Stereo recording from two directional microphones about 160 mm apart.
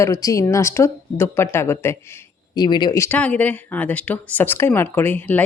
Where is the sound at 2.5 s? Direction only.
25° left (ahead or behind).